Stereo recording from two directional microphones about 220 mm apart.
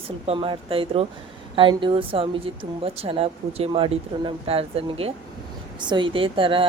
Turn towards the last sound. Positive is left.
turn(degrees=-25)  # may be behind; listen again after turning